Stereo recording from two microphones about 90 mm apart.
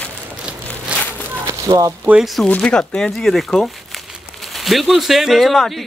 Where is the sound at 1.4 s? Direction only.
40° right (ahead or behind).